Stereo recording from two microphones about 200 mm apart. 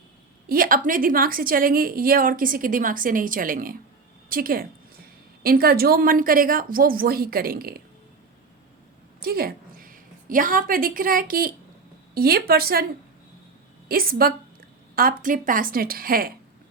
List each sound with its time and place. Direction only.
0.4 s a woman's voice: 45° right (ahead or behind)
9.2 s a woman's voice: 50° right (ahead or behind)
13.8 s a woman's voice: 50° right (ahead or behind)